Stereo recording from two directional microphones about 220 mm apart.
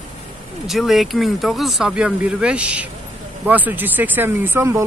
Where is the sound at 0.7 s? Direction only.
Centre (ahead or behind).